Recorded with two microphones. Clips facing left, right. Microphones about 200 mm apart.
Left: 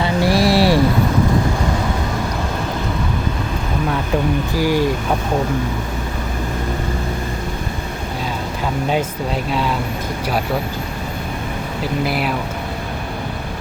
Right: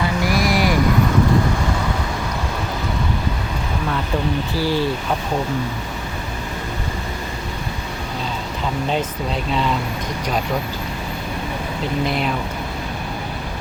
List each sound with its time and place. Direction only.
0.0 s a sound: 30° left (ahead or behind)
4.5 s speech: 15° left (ahead or behind)
9.5 s speech: 5° left (ahead or behind)
12.0 s speech: 5° left (ahead or behind)